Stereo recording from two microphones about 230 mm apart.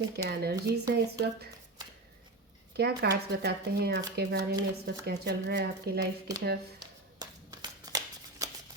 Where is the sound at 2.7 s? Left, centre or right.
Right.